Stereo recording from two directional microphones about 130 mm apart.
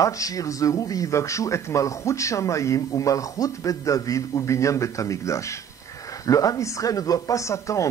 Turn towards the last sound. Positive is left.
turn(degrees=25)  # may be behind; listen again after turning